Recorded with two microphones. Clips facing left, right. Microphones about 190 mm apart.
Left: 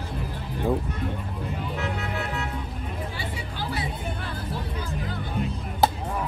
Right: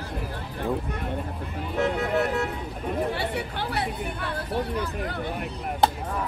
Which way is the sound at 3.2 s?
65° right (ahead or behind).